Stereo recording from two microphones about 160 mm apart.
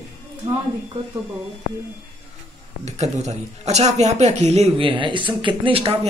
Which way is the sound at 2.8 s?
45° right (ahead or behind).